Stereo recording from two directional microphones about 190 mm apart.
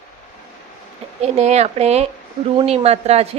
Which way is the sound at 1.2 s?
35° right (ahead or behind).